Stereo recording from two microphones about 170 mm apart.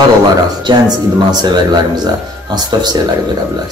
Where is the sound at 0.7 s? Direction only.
25° right (ahead or behind).